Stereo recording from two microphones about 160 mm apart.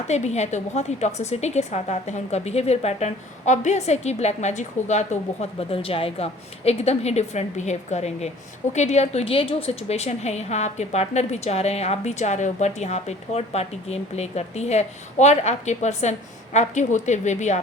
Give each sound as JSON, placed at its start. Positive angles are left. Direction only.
{"t": 0.1, "sound": "a woman's voice", "side_deg": 45}